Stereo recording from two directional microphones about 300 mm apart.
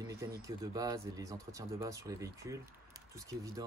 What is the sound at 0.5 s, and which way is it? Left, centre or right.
Speech, centre.